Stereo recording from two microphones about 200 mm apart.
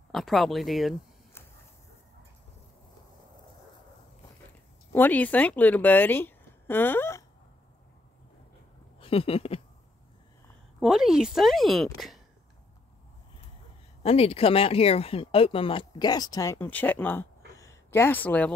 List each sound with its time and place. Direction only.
0.1 s a woman's voice: centre (ahead or behind)
4.9 s a woman's voice: 10° left (ahead or behind)
9.0 s a sound: 30° left (ahead or behind)
10.8 s a woman's voice: 5° right (ahead or behind)
14.0 s speech: 30° left (ahead or behind); by 17.3 s 10° left (ahead or behind)
17.6 s a sound: 15° left (ahead or behind)